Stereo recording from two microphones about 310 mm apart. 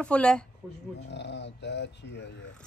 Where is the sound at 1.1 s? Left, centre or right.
Left.